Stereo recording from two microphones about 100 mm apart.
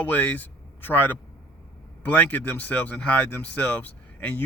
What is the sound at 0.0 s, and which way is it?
Speech, 15° left (ahead or behind).